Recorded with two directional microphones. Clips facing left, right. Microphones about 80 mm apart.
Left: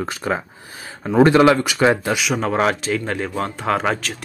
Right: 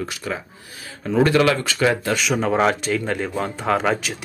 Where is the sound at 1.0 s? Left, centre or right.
Left.